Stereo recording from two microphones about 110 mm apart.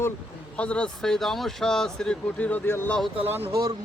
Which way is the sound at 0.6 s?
10° left (ahead or behind).